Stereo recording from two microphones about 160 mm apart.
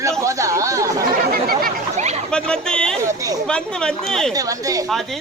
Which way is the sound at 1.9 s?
45° right (ahead or behind).